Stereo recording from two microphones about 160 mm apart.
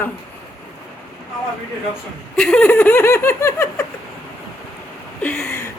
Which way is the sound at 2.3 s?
5° left (ahead or behind).